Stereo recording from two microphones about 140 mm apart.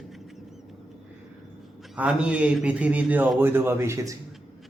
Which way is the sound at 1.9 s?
5° right (ahead or behind).